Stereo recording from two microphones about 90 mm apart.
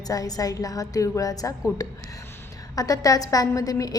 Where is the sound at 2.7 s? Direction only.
40° left (ahead or behind).